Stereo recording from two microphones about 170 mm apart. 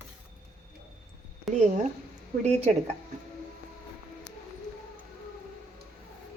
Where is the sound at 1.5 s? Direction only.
45° right (ahead or behind).